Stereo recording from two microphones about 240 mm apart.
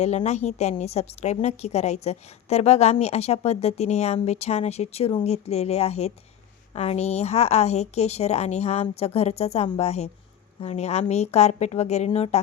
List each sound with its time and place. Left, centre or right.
0.0 s a woman's voice: left